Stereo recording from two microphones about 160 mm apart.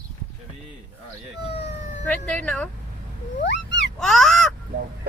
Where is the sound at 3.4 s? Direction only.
90° left.